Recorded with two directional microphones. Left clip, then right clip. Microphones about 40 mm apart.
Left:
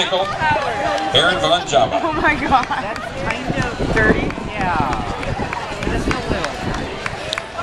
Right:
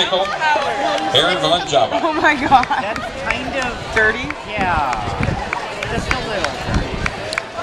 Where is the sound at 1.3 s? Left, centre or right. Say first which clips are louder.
Even; left.